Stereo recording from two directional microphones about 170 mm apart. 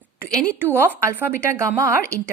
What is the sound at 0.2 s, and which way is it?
A woman's voice, 10° right (ahead or behind).